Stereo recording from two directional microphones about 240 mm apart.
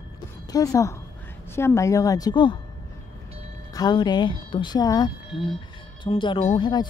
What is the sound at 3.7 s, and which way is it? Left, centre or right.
Speech, centre.